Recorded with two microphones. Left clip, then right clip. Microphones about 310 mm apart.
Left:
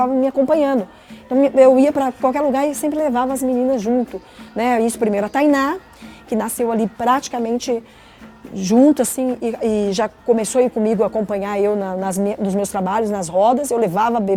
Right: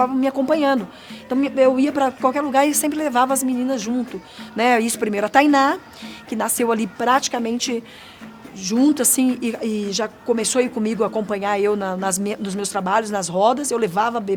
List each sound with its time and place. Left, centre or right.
0.2 s speech: left
0.5 s speech: left
1.4 s a woman's voice: left
6.3 s speech: left
7.0 s a woman's voice: left
8.5 s a woman's voice: left
9.1 s speech: left
9.6 s a woman's voice: left
10.4 s a woman's voice: left